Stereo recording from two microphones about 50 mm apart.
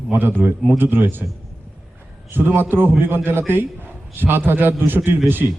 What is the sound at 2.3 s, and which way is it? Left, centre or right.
A man's voice, right.